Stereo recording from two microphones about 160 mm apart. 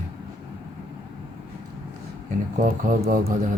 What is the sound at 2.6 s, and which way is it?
Speech, 60° right (ahead or behind).